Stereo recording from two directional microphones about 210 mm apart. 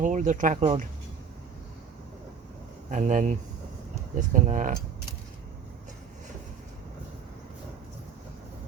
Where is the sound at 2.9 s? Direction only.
35° right (ahead or behind).